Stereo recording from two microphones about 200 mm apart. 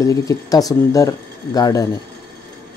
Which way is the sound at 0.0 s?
15° left (ahead or behind).